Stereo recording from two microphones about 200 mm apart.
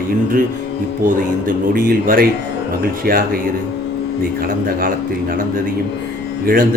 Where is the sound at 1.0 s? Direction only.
45° right (ahead or behind).